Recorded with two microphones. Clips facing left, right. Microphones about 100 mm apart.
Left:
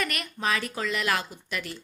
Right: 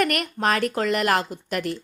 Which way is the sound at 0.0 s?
60° right (ahead or behind).